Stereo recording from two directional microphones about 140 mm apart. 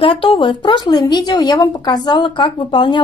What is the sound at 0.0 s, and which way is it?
Speech, 40° left (ahead or behind).